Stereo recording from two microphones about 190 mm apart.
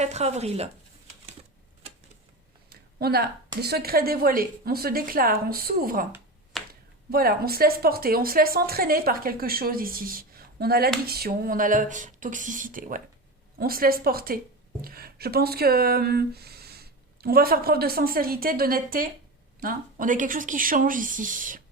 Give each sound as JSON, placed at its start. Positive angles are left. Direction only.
{"t": 0.0, "sound": "speech", "side_deg": -35}
{"t": 2.6, "sound": "a sound", "side_deg": -55}
{"t": 3.6, "sound": "a woman's voice", "side_deg": -55}
{"t": 6.5, "sound": "finger snapping", "side_deg": 0}
{"t": 7.1, "sound": "a woman's voice", "side_deg": -50}